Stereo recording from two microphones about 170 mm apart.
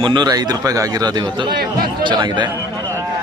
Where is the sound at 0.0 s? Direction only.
25° right (ahead or behind).